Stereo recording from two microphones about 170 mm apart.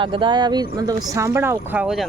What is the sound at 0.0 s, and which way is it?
Speech, 30° right (ahead or behind).